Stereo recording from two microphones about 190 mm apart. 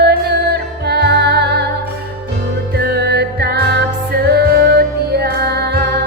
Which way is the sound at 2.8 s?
55° right (ahead or behind).